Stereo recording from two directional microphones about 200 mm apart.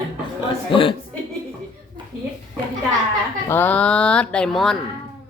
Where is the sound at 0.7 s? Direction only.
25° left (ahead or behind).